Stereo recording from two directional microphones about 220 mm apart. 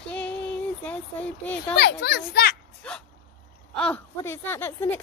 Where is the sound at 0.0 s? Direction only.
5° left (ahead or behind).